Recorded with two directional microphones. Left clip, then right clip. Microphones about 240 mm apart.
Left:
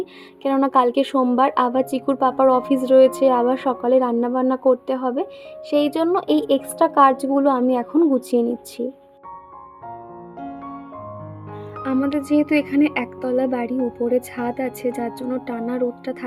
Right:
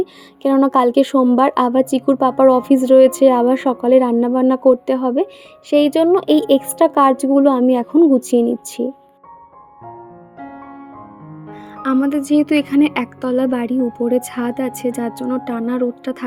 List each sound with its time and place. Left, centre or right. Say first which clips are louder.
0.0 s a woman's voice: right 6 dB; right
11.8 s speech: right 5 dB; right